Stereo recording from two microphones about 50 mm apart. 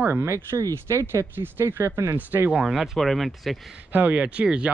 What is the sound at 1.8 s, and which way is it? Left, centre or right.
Speech, right.